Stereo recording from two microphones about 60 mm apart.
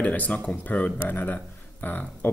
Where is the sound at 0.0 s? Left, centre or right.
Left.